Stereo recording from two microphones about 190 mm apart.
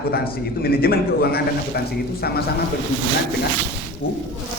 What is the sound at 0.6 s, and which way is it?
A man's voice, 50° left (ahead or behind).